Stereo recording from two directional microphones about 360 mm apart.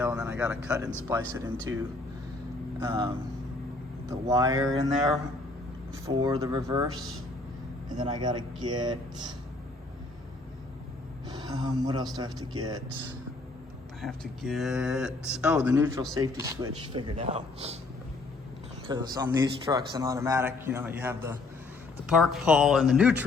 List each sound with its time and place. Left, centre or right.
0.0 s speech: centre
2.8 s a man's voice: centre
4.1 s a man's voice: centre
6.1 s a man's voice: centre
11.3 s a man's voice: centre
14.0 s a man's voice: centre
18.9 s a man's voice: centre